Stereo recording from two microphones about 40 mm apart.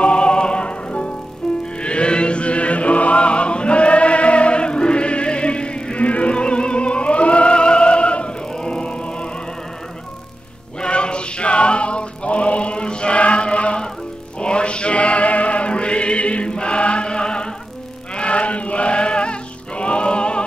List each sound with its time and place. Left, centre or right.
0.0 s music: left
1.4 s music: centre
1.8 s chant: left
6.0 s music: left
10.8 s music: left